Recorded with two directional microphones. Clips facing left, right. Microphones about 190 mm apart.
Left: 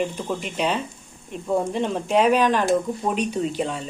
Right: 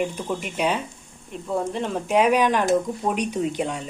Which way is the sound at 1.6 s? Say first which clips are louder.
Left 2 dB; 5° right (ahead or behind).